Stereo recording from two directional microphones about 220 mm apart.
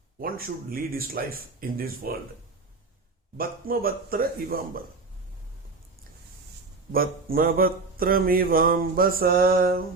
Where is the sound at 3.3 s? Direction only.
40° right (ahead or behind).